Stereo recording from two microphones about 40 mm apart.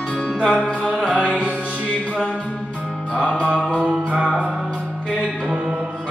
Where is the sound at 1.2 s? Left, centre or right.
Right.